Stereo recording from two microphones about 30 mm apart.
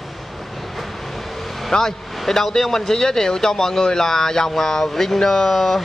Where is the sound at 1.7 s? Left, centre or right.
Left.